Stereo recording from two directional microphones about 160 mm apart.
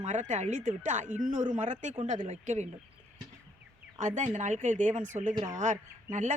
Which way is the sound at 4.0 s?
50° right (ahead or behind).